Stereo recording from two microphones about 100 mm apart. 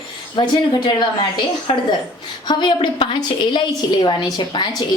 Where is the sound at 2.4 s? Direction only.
50° left (ahead or behind).